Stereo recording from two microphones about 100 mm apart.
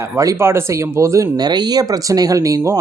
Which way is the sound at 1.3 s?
45° right (ahead or behind).